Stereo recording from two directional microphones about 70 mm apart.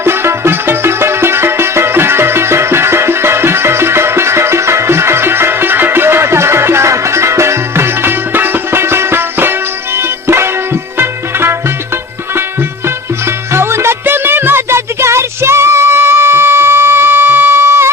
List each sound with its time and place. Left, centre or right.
0.0 s music: right
13.5 s music: right